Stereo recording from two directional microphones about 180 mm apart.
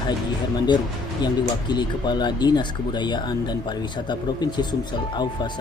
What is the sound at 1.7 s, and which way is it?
Speech, 25° left (ahead or behind).